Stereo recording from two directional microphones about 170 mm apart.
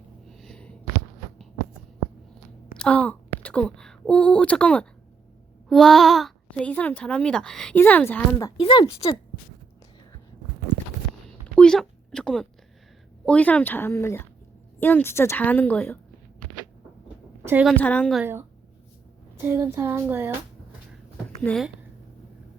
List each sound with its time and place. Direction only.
0.3 s a sound: centre (ahead or behind)
2.7 s a child's voice: 5° left (ahead or behind)
8.5 s speech: 30° left (ahead or behind)
11.5 s a sound: 5° left (ahead or behind)
13.2 s a child's voice: 10° left (ahead or behind)
17.4 s a woman's voice: 10° right (ahead or behind)
17.7 s a child's voice: 10° left (ahead or behind)
18.2 s child singing: 15° right (ahead or behind)
21.4 s speech: 5° left (ahead or behind)